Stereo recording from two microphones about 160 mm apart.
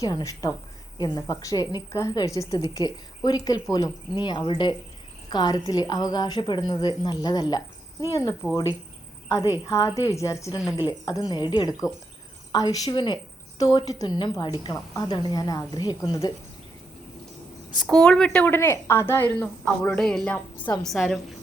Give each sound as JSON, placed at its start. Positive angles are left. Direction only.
{"t": 0.0, "sound": "a woman's voice", "side_deg": 25}
{"t": 9.6, "sound": "a woman's voice", "side_deg": 20}
{"t": 10.6, "sound": "a woman's voice", "side_deg": -5}
{"t": 10.8, "sound": "a woman's voice", "side_deg": 25}
{"t": 17.8, "sound": "a woman's voice", "side_deg": 5}